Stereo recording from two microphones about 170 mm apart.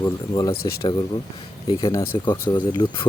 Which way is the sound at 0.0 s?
20° left (ahead or behind).